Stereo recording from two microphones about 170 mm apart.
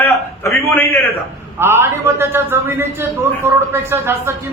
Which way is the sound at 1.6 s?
15° right (ahead or behind).